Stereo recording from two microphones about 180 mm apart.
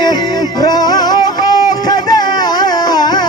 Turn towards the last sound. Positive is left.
turn(degrees=25)  # may be behind; listen again after turning